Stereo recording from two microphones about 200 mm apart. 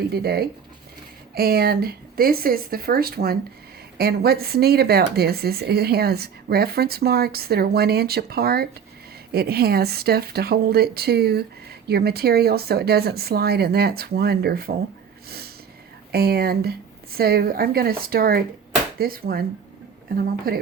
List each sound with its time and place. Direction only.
0.1 s speech: 50° right (ahead or behind)
16.1 s speech: 50° right (ahead or behind)